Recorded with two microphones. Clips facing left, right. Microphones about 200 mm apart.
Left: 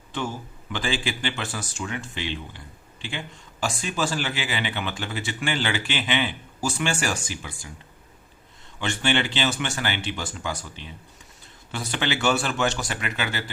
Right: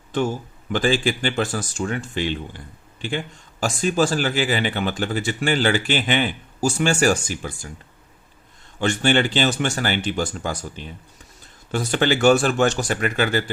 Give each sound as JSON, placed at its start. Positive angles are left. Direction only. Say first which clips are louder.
{"t": 0.7, "sound": "speech", "louder": "right 8 dB", "side_deg": -45}
{"t": 8.8, "sound": "speech", "louder": "right 6 dB", "side_deg": -45}